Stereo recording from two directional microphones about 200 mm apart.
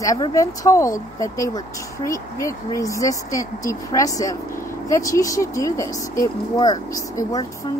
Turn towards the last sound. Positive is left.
turn(degrees=15)  # may be behind; listen again after turning